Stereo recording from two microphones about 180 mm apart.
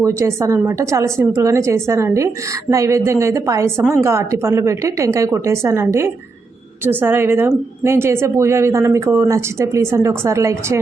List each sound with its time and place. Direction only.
0.0 s a woman's voice: 15° right (ahead or behind)